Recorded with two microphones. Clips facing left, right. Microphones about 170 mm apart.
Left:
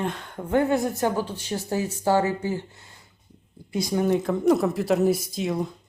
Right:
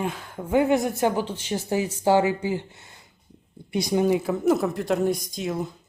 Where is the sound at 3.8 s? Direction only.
15° right (ahead or behind).